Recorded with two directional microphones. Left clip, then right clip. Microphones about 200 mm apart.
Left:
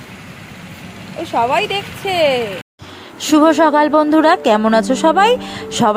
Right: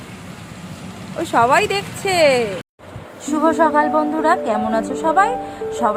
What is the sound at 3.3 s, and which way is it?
Speech, 25° left (ahead or behind).